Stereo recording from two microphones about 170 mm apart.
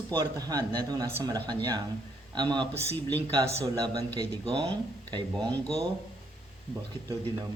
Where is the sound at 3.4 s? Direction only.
20° right (ahead or behind).